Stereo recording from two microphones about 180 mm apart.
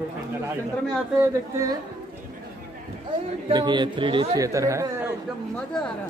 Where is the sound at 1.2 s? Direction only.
15° right (ahead or behind).